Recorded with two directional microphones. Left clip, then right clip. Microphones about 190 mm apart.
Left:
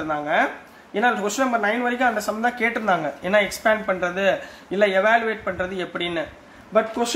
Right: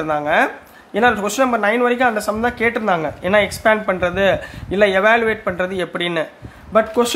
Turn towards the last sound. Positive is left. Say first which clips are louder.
# right 5 dB
turn(degrees=-45)  # may be behind; listen again after turning